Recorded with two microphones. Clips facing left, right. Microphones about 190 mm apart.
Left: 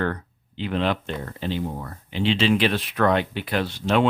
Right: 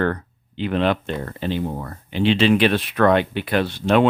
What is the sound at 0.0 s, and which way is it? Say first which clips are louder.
Speech: right 4 dB; 55° right (ahead or behind).